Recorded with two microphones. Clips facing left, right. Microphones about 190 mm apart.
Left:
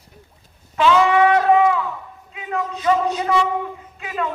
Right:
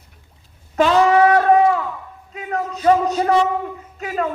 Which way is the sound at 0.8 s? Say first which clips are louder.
Right 2 dB; 40° right (ahead or behind).